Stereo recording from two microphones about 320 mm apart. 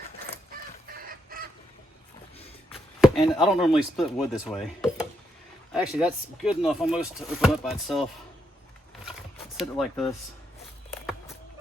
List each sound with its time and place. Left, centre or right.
0.9 s chicken: right
3.0 s speech: centre
9.6 s speech: centre